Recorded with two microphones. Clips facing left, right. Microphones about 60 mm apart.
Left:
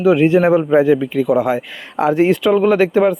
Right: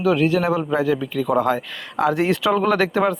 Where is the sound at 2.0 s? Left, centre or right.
Left.